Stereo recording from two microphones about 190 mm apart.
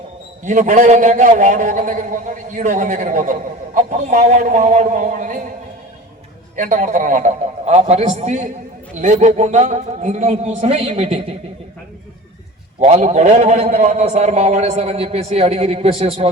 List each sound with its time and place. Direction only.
0.4 s a man's voice: 40° right (ahead or behind)
6.6 s a man's voice: 45° right (ahead or behind)
12.8 s a man's voice: 35° right (ahead or behind)